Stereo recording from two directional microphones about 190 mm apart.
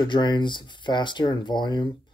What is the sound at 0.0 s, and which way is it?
Speech, 25° left (ahead or behind).